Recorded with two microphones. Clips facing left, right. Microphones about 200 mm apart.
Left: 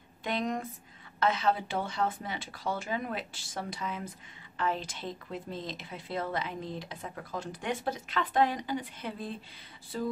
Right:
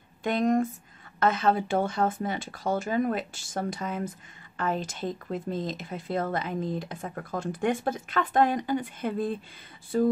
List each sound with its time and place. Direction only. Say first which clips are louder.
0.2 s speech: right 8 dB; 50° right (ahead or behind)